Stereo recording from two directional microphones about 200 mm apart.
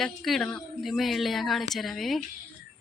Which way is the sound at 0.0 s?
Centre (ahead or behind).